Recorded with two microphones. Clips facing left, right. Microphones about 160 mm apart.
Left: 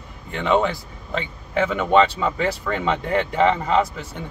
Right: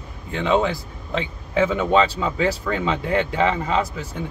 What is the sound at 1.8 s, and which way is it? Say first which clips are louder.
Speech: left 1 dB; centre (ahead or behind).